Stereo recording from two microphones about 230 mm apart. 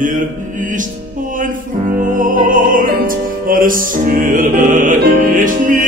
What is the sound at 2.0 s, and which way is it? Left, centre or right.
Music, right.